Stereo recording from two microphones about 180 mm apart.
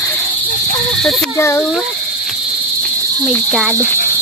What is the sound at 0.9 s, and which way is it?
Speech, centre (ahead or behind).